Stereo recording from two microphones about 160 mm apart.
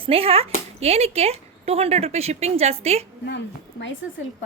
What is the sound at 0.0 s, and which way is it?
Speech, 35° right (ahead or behind).